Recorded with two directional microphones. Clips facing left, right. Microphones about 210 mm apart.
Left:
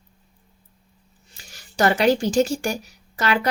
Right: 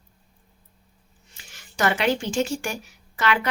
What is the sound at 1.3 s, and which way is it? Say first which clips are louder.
Speech: left 4 dB; 40° left (ahead or behind).